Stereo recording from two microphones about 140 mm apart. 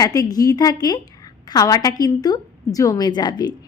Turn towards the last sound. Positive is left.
turn(degrees=30)  # may be behind; listen again after turning